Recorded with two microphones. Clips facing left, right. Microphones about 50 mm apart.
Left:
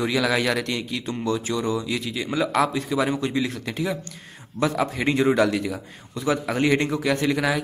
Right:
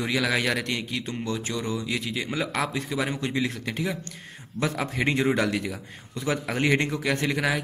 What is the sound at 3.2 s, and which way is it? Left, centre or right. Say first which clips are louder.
A man's voice: left 3 dB; right.